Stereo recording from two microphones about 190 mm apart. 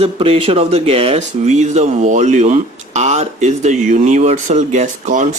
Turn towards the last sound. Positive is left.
turn(degrees=-40)  # may be behind; listen again after turning